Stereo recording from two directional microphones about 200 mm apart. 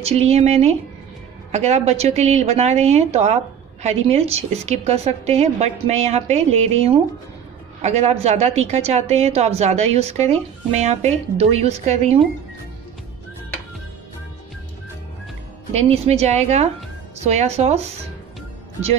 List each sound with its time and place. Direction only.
0.0 s a woman's voice: 30° right (ahead or behind)
15.7 s a woman's voice: 30° right (ahead or behind)